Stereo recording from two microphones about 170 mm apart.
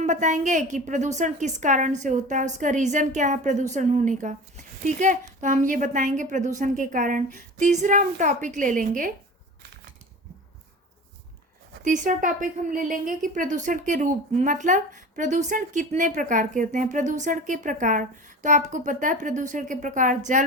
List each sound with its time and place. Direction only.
0.0 s a woman's voice: 45° right (ahead or behind)
11.8 s a woman's voice: 50° right (ahead or behind)